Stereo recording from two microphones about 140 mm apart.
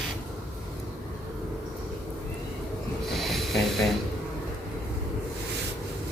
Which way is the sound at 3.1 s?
Centre (ahead or behind).